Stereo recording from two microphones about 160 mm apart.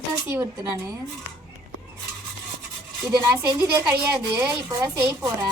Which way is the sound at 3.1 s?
25° right (ahead or behind).